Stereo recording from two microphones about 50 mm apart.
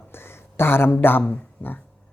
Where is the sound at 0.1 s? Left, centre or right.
Left.